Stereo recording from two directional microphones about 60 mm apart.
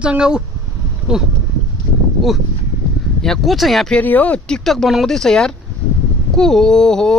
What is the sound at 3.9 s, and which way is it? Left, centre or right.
Speech, left.